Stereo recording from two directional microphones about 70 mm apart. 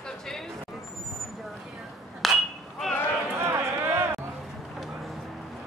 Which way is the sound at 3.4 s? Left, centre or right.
Right.